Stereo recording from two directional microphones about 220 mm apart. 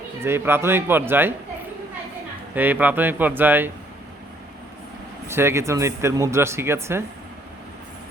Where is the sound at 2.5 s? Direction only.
10° right (ahead or behind).